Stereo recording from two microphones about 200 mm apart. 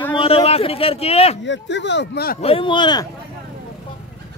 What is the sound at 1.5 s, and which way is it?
Speech, 65° left (ahead or behind).